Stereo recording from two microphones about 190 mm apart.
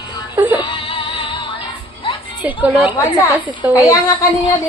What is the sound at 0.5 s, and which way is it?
Music, 25° left (ahead or behind).